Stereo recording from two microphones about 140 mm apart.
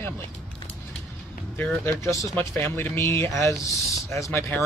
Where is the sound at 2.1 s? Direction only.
20° left (ahead or behind).